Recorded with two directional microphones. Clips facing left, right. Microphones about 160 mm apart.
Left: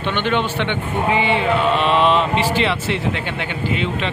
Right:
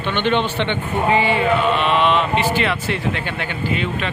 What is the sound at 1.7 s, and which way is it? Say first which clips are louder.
Speech: left 1 dB; 35° left (ahead or behind).